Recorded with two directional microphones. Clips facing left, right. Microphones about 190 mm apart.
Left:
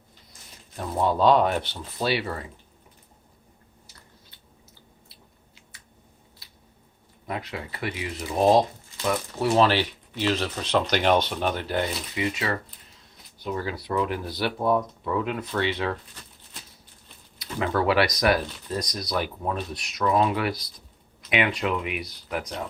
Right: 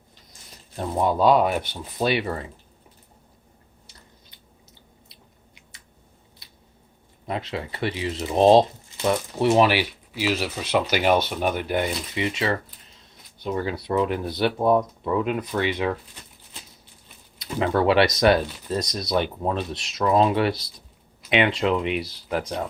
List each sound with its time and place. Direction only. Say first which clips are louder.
0.8 s speech: right 2 dB; 15° right (ahead or behind)
7.3 s speech: right 4 dB; 25° right (ahead or behind)
9.6 s speech: right 1 dB; 10° right (ahead or behind)
17.4 s speech: right 3 dB; 20° right (ahead or behind)